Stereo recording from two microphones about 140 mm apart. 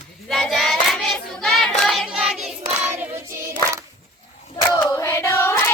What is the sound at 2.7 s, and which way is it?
Singing, 10° right (ahead or behind).